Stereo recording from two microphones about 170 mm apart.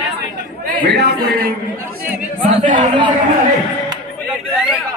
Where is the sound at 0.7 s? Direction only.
75° right (ahead or behind).